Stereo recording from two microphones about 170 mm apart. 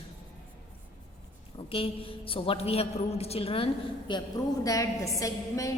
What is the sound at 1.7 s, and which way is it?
A man's voice, 30° left (ahead or behind).